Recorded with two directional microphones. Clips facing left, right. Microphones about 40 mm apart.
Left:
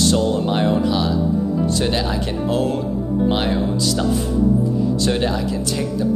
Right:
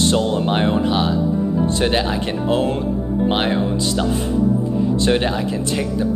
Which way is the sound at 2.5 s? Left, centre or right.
Right.